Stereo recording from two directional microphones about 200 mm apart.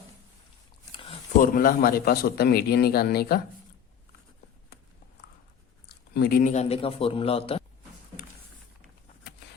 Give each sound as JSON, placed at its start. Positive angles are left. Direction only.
{"t": 1.4, "sound": "a man's voice", "side_deg": 45}
{"t": 6.1, "sound": "a man's voice", "side_deg": 50}